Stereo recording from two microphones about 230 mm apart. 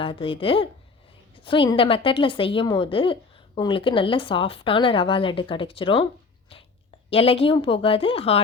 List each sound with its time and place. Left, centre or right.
0.0 s a woman's voice: left
7.1 s a woman's voice: left